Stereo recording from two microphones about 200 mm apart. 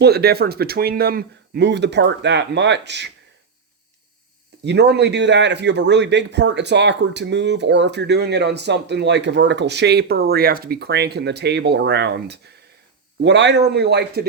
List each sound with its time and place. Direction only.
0.0 s speech: 50° right (ahead or behind)
4.6 s speech: 60° right (ahead or behind)